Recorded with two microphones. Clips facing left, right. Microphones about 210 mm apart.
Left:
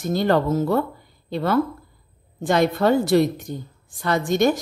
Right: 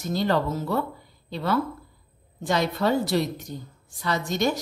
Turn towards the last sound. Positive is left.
turn(degrees=50)  # may be behind; listen again after turning